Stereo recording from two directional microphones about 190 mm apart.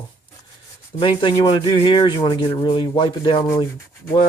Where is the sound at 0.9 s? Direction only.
25° left (ahead or behind).